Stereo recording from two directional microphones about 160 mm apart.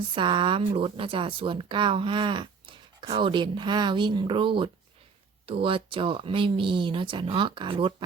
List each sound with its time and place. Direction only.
0.1 s speech: 30° right (ahead or behind)